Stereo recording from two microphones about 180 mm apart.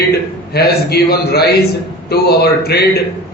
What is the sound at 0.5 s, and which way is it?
A man's voice, 60° left (ahead or behind).